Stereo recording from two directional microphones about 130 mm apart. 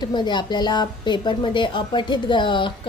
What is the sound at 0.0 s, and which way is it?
A woman's voice, 35° left (ahead or behind).